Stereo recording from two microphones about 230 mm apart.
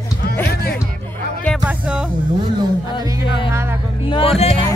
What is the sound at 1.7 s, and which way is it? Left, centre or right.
Music, centre.